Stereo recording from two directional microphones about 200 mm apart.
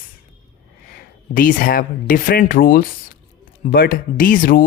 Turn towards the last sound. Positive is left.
turn(degrees=45)  # may be behind; listen again after turning